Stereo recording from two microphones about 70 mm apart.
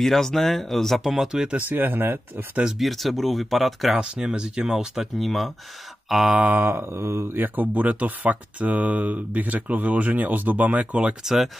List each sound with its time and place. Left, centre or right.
0.0 s speech: centre
1.7 s speech: right
2.8 s speech: centre
4.0 s speech: centre
6.0 s a sound: centre
6.3 s speech: right
11.2 s speech: centre